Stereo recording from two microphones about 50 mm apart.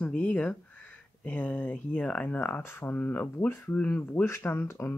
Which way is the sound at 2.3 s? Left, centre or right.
Left.